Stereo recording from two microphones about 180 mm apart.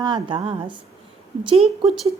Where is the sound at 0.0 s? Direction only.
25° right (ahead or behind).